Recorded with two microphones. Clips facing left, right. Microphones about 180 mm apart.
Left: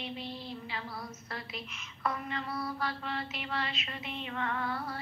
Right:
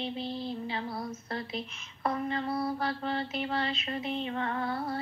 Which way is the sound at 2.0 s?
35° right (ahead or behind).